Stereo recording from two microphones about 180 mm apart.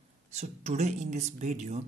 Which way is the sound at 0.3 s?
40° right (ahead or behind).